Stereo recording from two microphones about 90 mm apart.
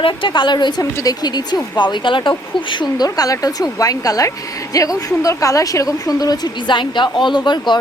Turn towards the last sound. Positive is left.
turn(degrees=55)  # may be behind; listen again after turning